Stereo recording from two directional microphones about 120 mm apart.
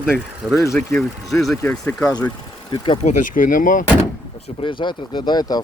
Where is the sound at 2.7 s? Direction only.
45° left (ahead or behind).